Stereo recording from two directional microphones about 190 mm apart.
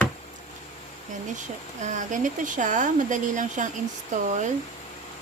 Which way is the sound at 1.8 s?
40° right (ahead or behind).